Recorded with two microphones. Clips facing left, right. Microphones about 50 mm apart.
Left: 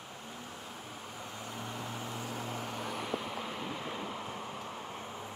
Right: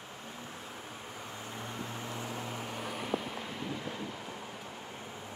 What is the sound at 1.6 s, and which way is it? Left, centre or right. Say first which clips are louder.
Vehicle: even; centre.